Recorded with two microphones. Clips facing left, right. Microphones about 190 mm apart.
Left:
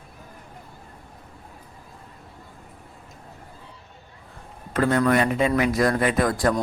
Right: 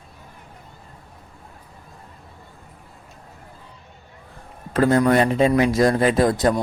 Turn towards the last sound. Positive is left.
turn(degrees=-25)  # may be behind; listen again after turning